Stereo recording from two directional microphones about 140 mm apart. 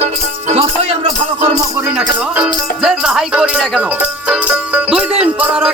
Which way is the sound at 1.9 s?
5° right (ahead or behind).